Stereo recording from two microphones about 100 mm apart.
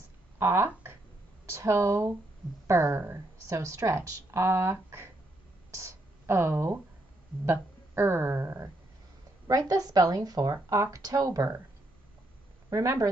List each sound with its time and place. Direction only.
0.4 s speech: 25° right (ahead or behind)
5.7 s a sound: 30° right (ahead or behind)
7.4 s speech: 25° right (ahead or behind)
9.5 s speech: 40° right (ahead or behind)
12.6 s speech: 30° right (ahead or behind)